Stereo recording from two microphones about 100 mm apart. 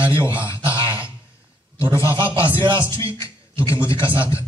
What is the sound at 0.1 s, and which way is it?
Speech, 25° left (ahead or behind).